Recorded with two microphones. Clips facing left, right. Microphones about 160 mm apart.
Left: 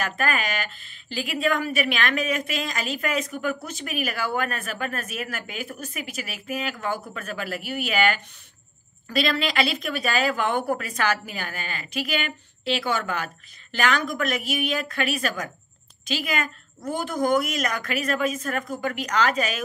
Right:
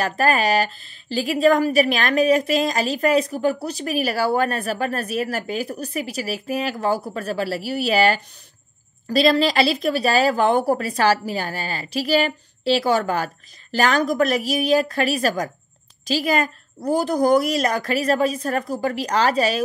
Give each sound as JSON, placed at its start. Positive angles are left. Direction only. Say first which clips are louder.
{"t": 0.0, "sound": "speech", "louder": "right 7 dB", "side_deg": -35}